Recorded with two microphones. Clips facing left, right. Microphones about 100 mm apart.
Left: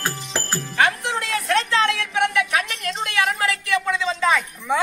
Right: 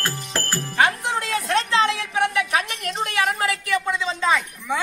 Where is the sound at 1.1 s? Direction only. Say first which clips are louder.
Even; 35° right (ahead or behind).